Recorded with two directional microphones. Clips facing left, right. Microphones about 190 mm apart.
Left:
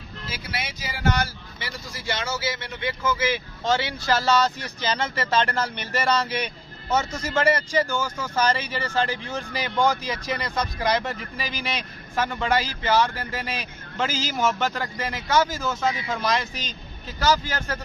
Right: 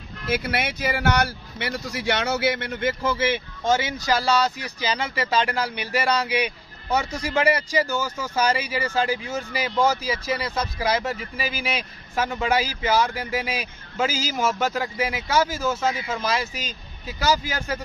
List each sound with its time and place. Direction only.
0.3 s speech: 60° right (ahead or behind); by 3.4 s 25° right (ahead or behind)
3.7 s speech: 15° right (ahead or behind)